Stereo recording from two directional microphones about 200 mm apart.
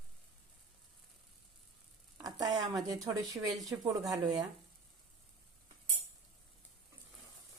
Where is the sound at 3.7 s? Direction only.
10° right (ahead or behind).